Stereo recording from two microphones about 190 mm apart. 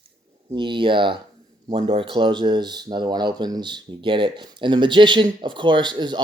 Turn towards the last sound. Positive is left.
turn(degrees=-25)  # may be behind; listen again after turning